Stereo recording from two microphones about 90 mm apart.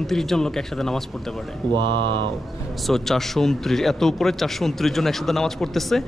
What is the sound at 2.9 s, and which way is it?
A man's voice, 5° left (ahead or behind).